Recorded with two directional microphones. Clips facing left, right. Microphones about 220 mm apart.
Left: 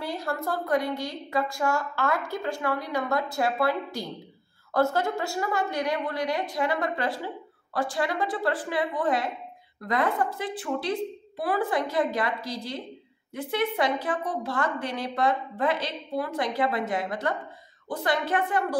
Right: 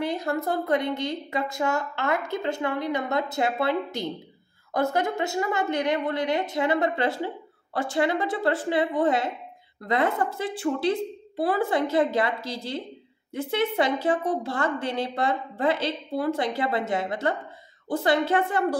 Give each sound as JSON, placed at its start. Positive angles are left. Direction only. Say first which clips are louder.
{"t": 0.0, "sound": "a woman's voice", "louder": "right 4 dB", "side_deg": -20}